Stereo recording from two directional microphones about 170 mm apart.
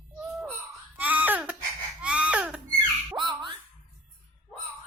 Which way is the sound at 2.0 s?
5° right (ahead or behind).